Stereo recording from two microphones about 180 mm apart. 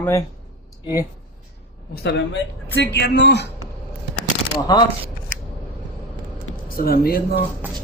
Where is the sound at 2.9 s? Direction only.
70° left (ahead or behind).